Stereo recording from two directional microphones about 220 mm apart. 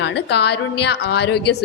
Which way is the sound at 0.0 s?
50° left (ahead or behind).